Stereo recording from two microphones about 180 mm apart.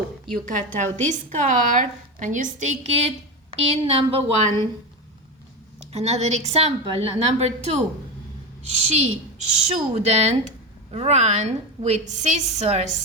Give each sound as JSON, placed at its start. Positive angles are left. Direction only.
{"t": 0.5, "sound": "a woman's voice", "side_deg": -40}
{"t": 5.9, "sound": "a woman's voice", "side_deg": -35}